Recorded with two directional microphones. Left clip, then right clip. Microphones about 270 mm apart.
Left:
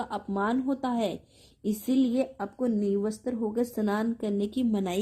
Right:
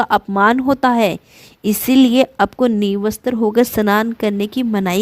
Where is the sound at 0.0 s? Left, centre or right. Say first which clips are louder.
Right 17 dB; right.